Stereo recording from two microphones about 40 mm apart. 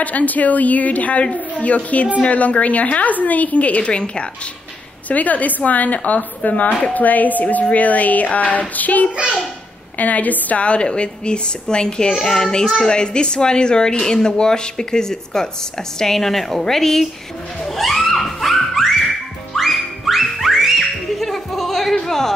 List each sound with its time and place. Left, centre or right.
0.0 s a woman's voice: left
5.0 s a woman's voice: left; by 17.1 s centre
17.6 s music: centre